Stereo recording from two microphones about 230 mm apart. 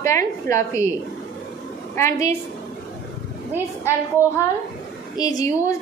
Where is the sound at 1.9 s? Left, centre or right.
Centre.